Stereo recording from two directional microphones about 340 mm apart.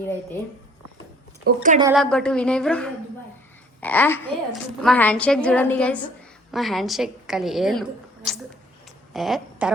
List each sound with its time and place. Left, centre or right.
1.5 s a woman's voice: right
1.8 s a woman's voice: centre